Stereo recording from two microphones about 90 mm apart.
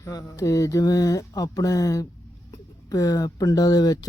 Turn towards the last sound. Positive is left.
turn(degrees=45)  # may be behind; listen again after turning